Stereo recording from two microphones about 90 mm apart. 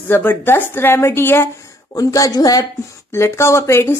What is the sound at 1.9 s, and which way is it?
Speech, 40° left (ahead or behind).